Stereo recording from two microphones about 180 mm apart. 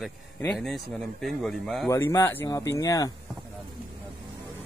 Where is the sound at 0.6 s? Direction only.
Centre (ahead or behind).